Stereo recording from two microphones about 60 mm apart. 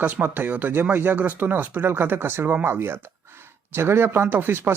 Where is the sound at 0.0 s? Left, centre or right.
Right.